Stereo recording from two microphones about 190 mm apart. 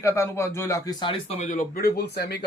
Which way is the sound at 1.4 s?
40° left (ahead or behind).